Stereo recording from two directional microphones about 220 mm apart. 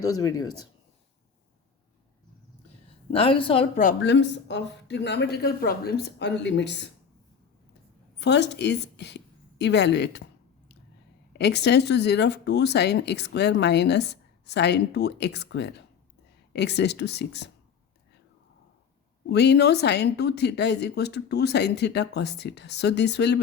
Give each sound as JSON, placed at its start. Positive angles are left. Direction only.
{"t": 0.0, "sound": "speech", "side_deg": 15}
{"t": 3.1, "sound": "a woman's voice", "side_deg": 25}
{"t": 4.0, "sound": "speech", "side_deg": 50}
{"t": 8.2, "sound": "a woman's voice", "side_deg": 50}
{"t": 11.3, "sound": "speech", "side_deg": 50}
{"t": 19.3, "sound": "speech", "side_deg": 50}